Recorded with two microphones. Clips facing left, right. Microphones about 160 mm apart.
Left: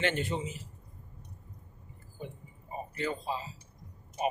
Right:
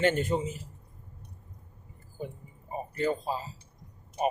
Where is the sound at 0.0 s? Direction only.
45° right (ahead or behind).